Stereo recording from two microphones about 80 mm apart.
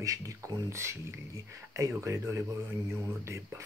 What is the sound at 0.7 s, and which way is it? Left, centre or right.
Speech, right.